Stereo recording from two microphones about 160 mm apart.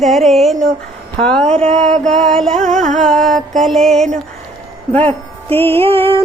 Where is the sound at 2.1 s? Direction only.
5° left (ahead or behind).